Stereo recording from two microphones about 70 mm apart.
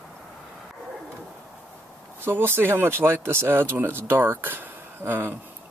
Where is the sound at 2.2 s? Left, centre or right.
Right.